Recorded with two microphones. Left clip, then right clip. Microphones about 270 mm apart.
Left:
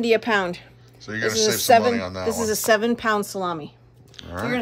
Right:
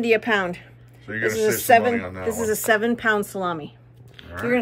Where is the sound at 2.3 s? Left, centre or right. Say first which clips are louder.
Even; left.